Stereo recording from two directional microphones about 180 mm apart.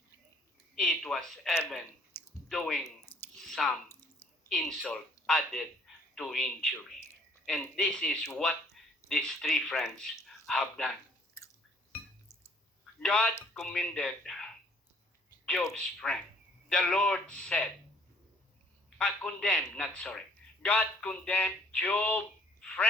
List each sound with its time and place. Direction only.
0.8 s speech: centre (ahead or behind)
2.1 s clicking: 10° left (ahead or behind)
2.5 s speech: centre (ahead or behind)
3.2 s chewing: centre (ahead or behind)
4.4 s speech: centre (ahead or behind)
11.4 s chewing: 15° left (ahead or behind)
13.0 s speech: 5° left (ahead or behind)
15.8 s speech: 5° left (ahead or behind)
18.9 s speech: 5° left (ahead or behind)